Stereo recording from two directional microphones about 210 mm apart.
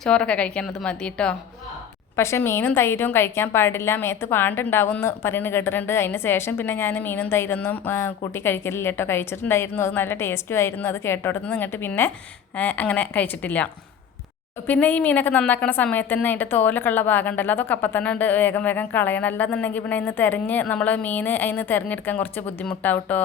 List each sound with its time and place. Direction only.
0.0 s a woman's voice: 5° left (ahead or behind)
14.7 s a woman's voice: 5° left (ahead or behind)